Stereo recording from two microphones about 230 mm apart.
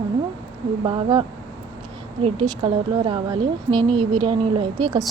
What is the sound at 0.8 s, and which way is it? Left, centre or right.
Speech, right.